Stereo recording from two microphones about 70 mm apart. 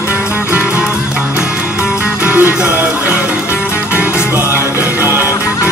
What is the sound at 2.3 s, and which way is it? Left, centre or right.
Music, right.